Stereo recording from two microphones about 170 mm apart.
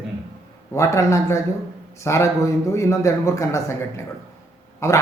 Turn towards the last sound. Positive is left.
turn(degrees=15)  # may be behind; listen again after turning